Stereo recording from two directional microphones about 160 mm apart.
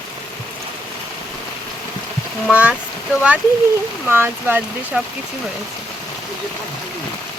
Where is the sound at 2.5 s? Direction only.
10° right (ahead or behind).